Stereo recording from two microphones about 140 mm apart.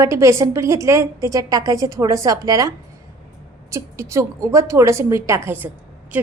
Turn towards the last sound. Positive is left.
turn(degrees=-10)  # may be behind; listen again after turning